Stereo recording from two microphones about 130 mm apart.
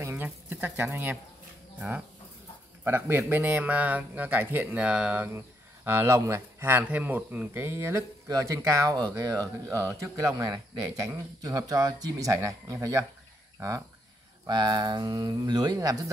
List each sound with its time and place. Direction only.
0.0 s a sound: 15° right (ahead or behind)
1.8 s a man's voice: 15° right (ahead or behind)
14.4 s speech: 35° right (ahead or behind)